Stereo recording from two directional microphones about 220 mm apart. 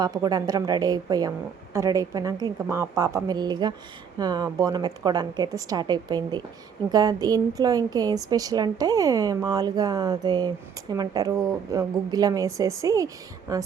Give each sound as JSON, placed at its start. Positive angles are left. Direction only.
{"t": 0.0, "sound": "a woman's voice", "side_deg": -15}